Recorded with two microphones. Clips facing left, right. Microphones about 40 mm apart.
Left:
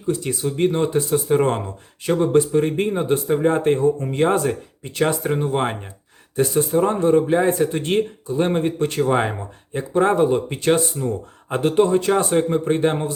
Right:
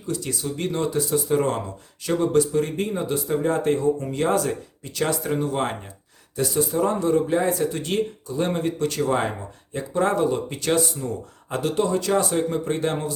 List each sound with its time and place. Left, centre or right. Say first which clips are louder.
0.1 s speech: left 5 dB; left